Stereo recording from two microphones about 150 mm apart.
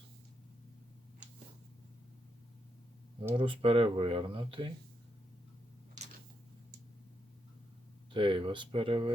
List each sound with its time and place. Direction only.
3.3 s speech: 35° right (ahead or behind)
8.1 s speech: 35° right (ahead or behind)